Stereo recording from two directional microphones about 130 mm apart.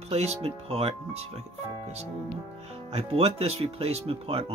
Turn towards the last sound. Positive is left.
turn(degrees=-50)  # may be behind; listen again after turning